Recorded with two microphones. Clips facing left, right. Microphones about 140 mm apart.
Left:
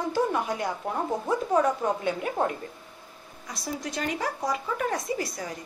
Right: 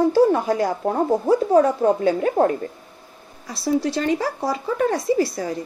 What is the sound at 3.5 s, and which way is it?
A woman's voice, 30° right (ahead or behind).